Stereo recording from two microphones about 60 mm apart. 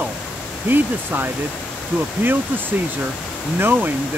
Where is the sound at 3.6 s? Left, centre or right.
Right.